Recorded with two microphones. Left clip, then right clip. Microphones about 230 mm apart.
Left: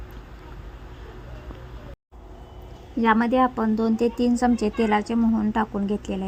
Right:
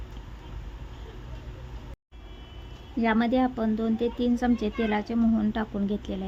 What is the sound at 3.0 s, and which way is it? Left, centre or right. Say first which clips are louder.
A woman's voice: left 5 dB; centre.